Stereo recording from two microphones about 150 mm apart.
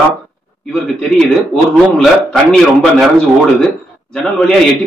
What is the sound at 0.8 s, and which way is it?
Speech, 5° left (ahead or behind).